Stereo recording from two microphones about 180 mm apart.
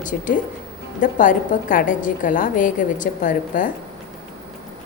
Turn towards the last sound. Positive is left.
turn(degrees=45)  # may be behind; listen again after turning